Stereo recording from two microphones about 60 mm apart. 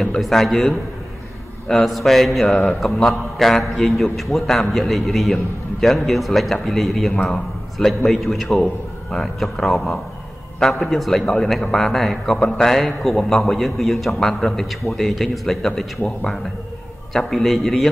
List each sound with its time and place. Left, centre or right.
0.2 s a man's voice: centre
1.9 s a man's voice: centre
2.4 s speech: centre
2.8 s a man's voice: centre
17.1 s a man's voice: centre